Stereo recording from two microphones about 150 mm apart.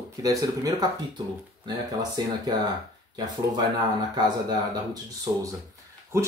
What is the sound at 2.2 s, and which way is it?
Speech, 25° right (ahead or behind).